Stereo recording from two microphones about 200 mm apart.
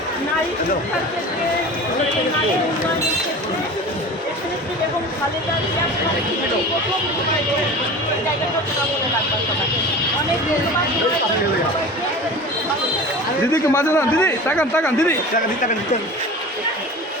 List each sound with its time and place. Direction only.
13.5 s a man's voice: 10° left (ahead or behind)